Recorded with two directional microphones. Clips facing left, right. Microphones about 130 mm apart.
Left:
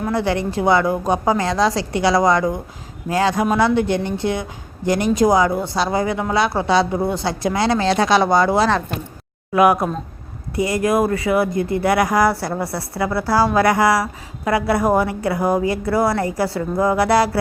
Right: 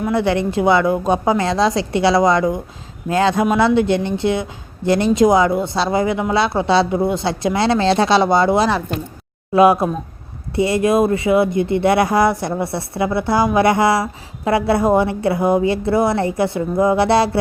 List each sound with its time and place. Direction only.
0.1 s speech: 20° right (ahead or behind)